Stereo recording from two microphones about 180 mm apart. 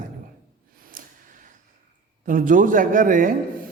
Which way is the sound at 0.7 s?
50° right (ahead or behind).